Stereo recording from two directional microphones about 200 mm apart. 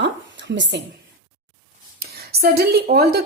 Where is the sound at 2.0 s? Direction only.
50° right (ahead or behind).